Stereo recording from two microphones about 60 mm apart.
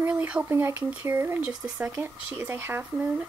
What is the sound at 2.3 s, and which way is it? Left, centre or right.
Speech, right.